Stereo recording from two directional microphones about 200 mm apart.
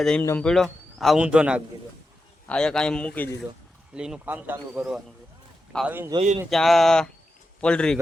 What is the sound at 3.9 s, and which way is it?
Speech, 5° right (ahead or behind).